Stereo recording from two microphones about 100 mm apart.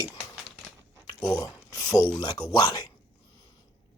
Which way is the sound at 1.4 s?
35° left (ahead or behind).